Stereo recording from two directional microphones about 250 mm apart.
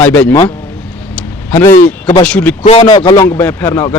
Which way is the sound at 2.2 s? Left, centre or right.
Centre.